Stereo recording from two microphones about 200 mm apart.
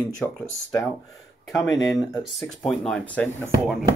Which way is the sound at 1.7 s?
Centre (ahead or behind).